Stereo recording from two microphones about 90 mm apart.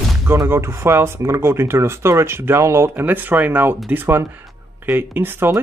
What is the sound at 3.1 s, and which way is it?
Speech, 20° right (ahead or behind).